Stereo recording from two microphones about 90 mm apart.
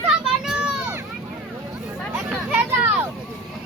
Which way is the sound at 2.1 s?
20° right (ahead or behind).